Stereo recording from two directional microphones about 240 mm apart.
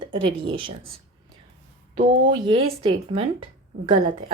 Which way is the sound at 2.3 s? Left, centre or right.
Centre.